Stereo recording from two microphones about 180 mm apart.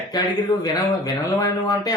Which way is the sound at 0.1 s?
20° left (ahead or behind).